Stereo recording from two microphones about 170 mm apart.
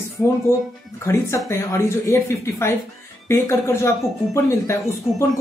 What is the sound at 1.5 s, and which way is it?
Speech, 15° left (ahead or behind).